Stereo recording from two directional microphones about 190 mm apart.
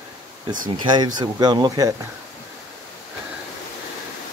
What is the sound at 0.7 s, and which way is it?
Speech, 20° right (ahead or behind).